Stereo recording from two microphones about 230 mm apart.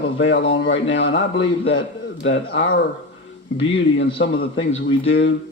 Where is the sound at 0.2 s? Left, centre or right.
Left.